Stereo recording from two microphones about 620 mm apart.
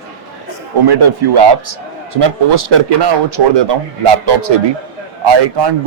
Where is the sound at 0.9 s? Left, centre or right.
Right.